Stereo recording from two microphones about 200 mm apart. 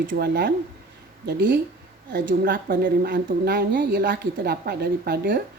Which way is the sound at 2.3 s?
45° right (ahead or behind).